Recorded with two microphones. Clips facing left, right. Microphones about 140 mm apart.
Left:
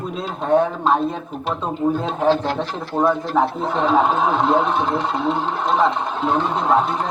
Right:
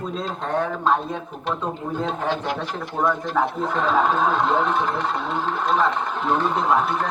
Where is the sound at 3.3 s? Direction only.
15° left (ahead or behind).